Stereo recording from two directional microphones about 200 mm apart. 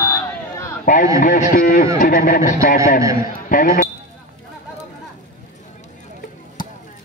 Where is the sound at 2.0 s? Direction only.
40° left (ahead or behind).